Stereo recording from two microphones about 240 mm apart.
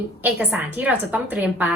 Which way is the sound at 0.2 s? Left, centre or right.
Centre.